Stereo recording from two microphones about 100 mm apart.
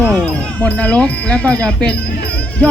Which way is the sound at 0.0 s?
15° left (ahead or behind).